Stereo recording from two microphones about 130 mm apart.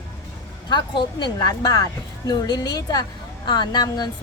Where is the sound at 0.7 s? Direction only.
35° left (ahead or behind).